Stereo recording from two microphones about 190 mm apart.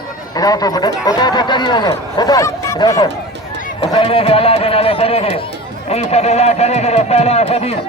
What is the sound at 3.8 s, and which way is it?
Speech, 30° left (ahead or behind).